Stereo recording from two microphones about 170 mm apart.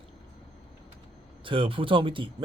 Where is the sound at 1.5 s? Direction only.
30° right (ahead or behind).